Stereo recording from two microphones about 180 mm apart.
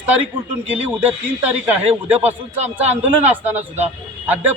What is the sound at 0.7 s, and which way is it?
Speech, 10° right (ahead or behind).